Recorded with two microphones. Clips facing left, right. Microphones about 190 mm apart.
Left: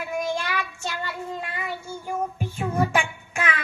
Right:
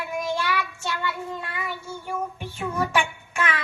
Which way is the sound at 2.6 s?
35° left (ahead or behind).